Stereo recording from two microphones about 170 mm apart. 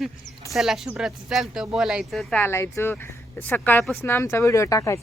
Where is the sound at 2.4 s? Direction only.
15° left (ahead or behind).